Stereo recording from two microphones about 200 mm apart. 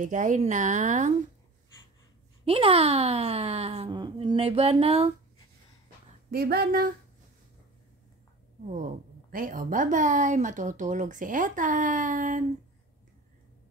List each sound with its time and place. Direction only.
0.0 s speech: 40° right (ahead or behind)
2.4 s speech: 30° right (ahead or behind)
6.3 s speech: 50° right (ahead or behind)
9.3 s speech: 45° right (ahead or behind)